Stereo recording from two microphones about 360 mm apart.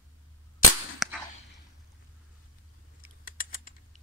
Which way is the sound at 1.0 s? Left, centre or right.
Centre.